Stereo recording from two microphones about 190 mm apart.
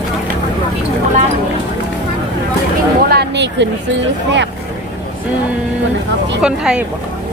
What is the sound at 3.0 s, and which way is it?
Speech, 60° right (ahead or behind).